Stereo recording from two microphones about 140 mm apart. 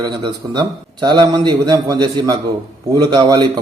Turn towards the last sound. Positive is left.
turn(degrees=-30)  # may be behind; listen again after turning